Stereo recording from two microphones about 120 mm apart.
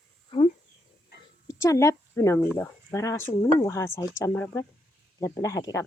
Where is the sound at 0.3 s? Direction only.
45° left (ahead or behind).